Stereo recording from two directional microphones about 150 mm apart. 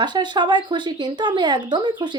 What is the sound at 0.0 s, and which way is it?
Speech, 30° right (ahead or behind).